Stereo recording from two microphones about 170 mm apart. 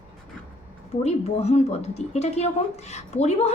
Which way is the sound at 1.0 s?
40° left (ahead or behind).